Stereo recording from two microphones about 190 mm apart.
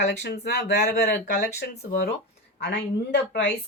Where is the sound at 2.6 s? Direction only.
65° left (ahead or behind).